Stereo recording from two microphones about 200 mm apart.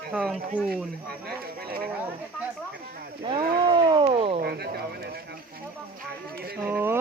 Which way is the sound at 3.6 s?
25° right (ahead or behind).